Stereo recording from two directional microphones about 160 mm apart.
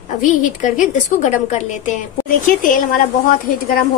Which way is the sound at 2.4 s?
55° left (ahead or behind).